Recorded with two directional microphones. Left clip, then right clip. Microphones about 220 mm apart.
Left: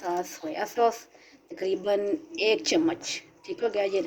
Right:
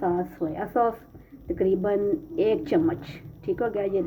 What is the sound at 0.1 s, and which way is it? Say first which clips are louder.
Speech: right 3 dB; 45° left (ahead or behind).